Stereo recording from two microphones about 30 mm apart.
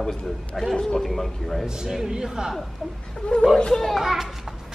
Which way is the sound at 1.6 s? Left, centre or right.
Centre.